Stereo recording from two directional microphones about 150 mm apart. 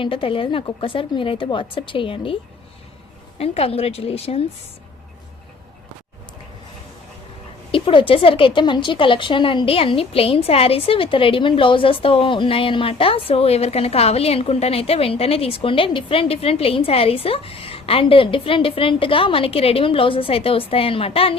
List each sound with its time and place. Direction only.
0.0 s a woman's voice: 35° left (ahead or behind)
7.7 s a woman's voice: 35° left (ahead or behind)